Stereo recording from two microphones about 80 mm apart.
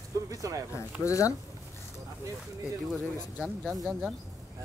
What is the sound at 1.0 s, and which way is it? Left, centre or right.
Speech, left.